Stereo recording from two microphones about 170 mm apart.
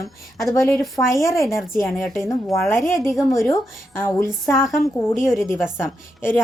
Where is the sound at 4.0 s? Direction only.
15° left (ahead or behind).